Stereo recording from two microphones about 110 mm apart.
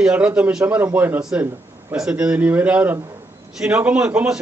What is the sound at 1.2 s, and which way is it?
A man's voice, 5° right (ahead or behind).